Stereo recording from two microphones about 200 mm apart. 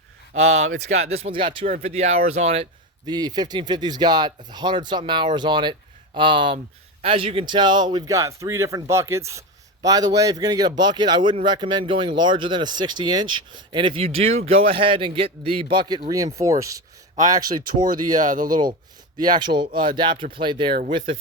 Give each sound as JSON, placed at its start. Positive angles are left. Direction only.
{"t": 0.5, "sound": "speech", "side_deg": -35}
{"t": 3.1, "sound": "speech", "side_deg": -20}
{"t": 17.8, "sound": "speech", "side_deg": -40}
{"t": 19.4, "sound": "speech", "side_deg": -25}